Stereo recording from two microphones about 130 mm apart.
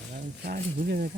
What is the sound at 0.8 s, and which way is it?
Speech, 90° right.